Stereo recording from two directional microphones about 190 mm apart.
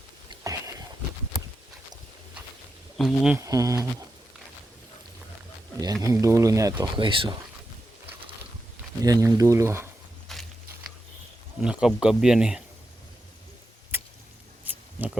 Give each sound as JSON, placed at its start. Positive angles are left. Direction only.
{"t": 0.4, "sound": "a sound", "side_deg": -15}
{"t": 3.0, "sound": "speech", "side_deg": -5}
{"t": 3.4, "sound": "speech", "side_deg": -15}
{"t": 5.8, "sound": "speech", "side_deg": -20}
{"t": 9.0, "sound": "speech", "side_deg": -15}
{"t": 10.3, "sound": "a sound", "side_deg": 0}
{"t": 11.6, "sound": "speech", "side_deg": -5}
{"t": 13.9, "sound": "vehicle", "side_deg": -10}
{"t": 14.7, "sound": "a sound", "side_deg": -10}